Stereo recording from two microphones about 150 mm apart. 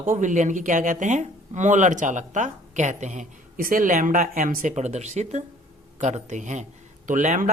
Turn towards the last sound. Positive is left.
turn(degrees=-60)  # may be behind; listen again after turning